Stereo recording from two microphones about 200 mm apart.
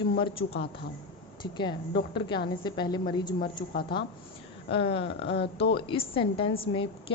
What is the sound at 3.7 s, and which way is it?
Speech, 50° left (ahead or behind).